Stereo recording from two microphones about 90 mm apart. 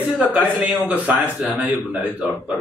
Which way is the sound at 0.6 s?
15° right (ahead or behind).